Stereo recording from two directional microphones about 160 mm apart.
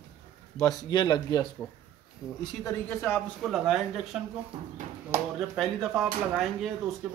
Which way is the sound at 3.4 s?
Centre (ahead or behind).